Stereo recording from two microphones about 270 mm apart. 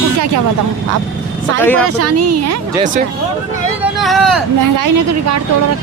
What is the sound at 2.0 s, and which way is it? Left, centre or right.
Speech, right.